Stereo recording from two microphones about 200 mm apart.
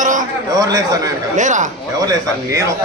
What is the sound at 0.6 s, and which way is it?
Speech, 20° right (ahead or behind).